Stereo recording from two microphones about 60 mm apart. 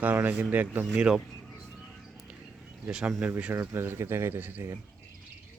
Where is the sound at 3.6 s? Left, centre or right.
Right.